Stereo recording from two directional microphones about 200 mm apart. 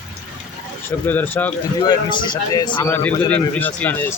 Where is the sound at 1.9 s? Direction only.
20° left (ahead or behind).